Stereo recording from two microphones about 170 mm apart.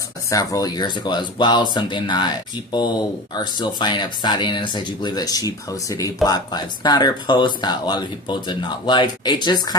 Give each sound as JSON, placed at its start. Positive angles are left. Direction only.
{"t": 0.3, "sound": "speech", "side_deg": 20}